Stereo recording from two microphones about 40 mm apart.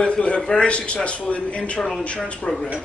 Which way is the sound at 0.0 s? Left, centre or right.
Left.